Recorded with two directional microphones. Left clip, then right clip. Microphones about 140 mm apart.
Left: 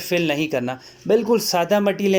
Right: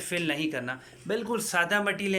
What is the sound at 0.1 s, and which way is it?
A man's voice, 35° left (ahead or behind).